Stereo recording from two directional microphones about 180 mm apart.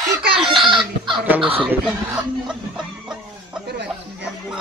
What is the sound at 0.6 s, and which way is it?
Chicken, 25° right (ahead or behind).